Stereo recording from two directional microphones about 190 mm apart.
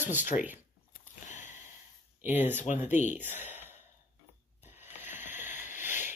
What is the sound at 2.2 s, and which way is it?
Speech, 10° right (ahead or behind).